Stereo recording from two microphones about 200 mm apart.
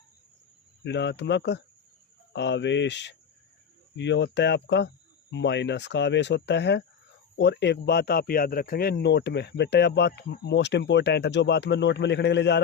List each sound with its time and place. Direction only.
0.9 s speech: 60° left (ahead or behind)